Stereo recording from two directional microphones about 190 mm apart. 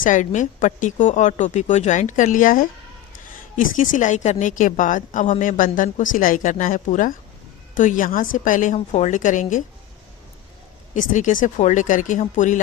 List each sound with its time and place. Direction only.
0.0 s a woman's voice: 40° left (ahead or behind)
10.9 s speech: 40° left (ahead or behind)